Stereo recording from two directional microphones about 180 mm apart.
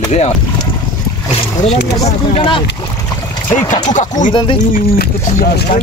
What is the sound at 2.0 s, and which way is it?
Speech, 30° left (ahead or behind).